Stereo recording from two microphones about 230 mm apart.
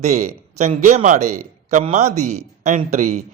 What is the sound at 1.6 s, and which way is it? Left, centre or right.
A man's voice, right.